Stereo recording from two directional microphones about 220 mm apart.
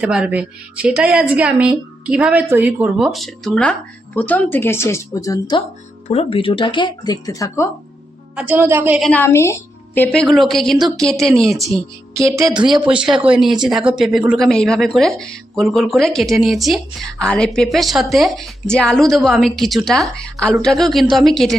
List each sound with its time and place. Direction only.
0.0 s speech: 5° right (ahead or behind); by 7.7 s 15° left (ahead or behind)
8.4 s a woman's voice: 10° right (ahead or behind)
9.0 s speech: 10° left (ahead or behind)
12.4 s a woman's voice: 15° right (ahead or behind)
12.6 s speech: 5° right (ahead or behind)